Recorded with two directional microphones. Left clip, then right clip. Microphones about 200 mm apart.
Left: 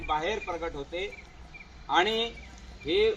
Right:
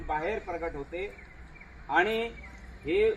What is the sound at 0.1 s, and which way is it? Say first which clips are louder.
Speech: left 2 dB; 20° right (ahead or behind).